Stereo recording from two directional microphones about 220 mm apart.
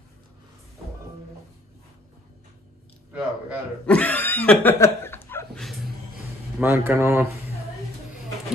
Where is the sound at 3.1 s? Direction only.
5° right (ahead or behind).